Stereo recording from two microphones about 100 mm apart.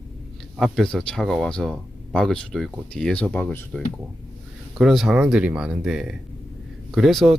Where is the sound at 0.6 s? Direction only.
5° left (ahead or behind).